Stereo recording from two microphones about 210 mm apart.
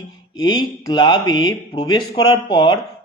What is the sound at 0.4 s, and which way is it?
A man's voice, 20° left (ahead or behind).